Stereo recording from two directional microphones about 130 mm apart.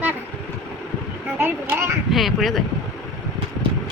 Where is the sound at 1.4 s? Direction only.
20° right (ahead or behind).